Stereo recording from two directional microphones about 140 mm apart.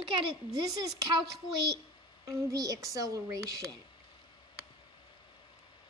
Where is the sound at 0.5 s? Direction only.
25° right (ahead or behind).